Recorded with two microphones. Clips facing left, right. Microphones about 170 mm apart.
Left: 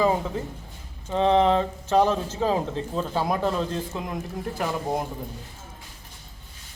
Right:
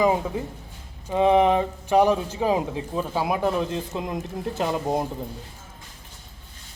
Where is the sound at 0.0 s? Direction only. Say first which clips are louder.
Right 1 dB; 15° right (ahead or behind).